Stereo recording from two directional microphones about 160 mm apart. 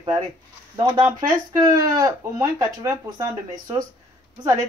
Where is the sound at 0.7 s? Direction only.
30° right (ahead or behind).